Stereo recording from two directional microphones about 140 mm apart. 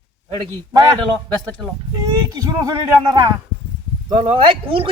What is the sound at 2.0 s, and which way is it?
Speech, 25° right (ahead or behind).